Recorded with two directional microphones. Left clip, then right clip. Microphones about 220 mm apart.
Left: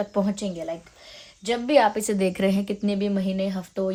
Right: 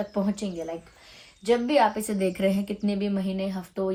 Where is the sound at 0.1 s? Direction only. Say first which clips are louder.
Left 3 dB; 45° left (ahead or behind).